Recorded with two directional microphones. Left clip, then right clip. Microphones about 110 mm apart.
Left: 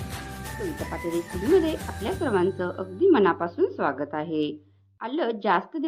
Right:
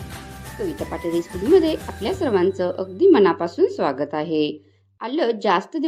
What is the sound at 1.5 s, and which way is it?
A woman's voice, 25° right (ahead or behind).